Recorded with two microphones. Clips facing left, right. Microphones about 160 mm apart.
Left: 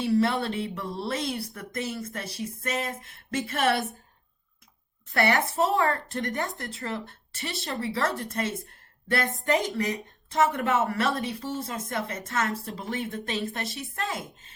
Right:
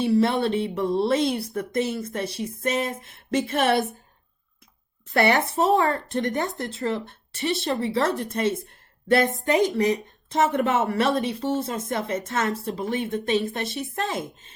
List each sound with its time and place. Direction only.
0.0 s speech: 20° right (ahead or behind)
5.1 s speech: 20° right (ahead or behind)